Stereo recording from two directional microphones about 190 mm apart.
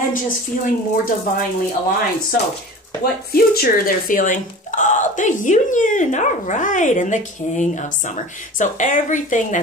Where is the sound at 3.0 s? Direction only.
55° left (ahead or behind).